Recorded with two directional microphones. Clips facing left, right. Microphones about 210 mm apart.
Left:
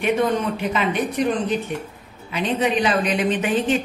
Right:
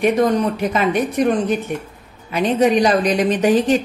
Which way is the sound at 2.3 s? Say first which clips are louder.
Right 6 dB; 40° right (ahead or behind).